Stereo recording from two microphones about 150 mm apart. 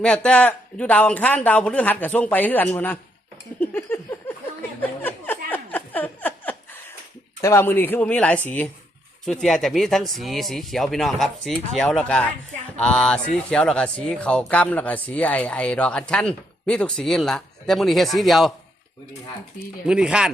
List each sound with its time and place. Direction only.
0.0 s speech: 5° left (ahead or behind)
3.6 s a sound: 15° left (ahead or behind)
4.8 s speech: 10° left (ahead or behind)
5.5 s a sound: 10° left (ahead or behind)
7.4 s speech: 15° left (ahead or behind); by 18.5 s centre (ahead or behind)
19.9 s speech: 5° right (ahead or behind)